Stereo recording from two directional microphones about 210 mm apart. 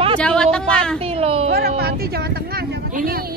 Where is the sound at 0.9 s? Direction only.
25° right (ahead or behind).